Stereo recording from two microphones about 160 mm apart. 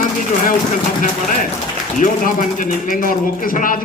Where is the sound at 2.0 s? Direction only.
55° left (ahead or behind).